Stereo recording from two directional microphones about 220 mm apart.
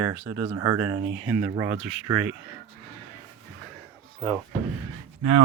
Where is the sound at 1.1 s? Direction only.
35° right (ahead or behind).